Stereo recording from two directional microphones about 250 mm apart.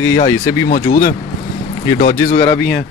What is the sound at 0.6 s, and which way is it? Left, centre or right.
Speech, left.